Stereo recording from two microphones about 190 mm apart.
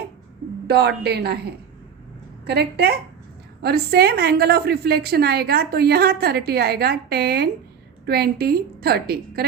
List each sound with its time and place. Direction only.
0.7 s a woman's voice: 60° right (ahead or behind)
2.5 s a woman's voice: 60° right (ahead or behind)